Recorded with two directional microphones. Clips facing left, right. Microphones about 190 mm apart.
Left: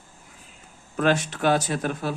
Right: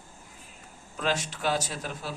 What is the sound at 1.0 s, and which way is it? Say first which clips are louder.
Speech: left 8 dB; 55° left (ahead or behind).